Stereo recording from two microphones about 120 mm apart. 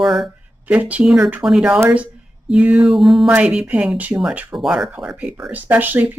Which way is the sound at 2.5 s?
5° right (ahead or behind).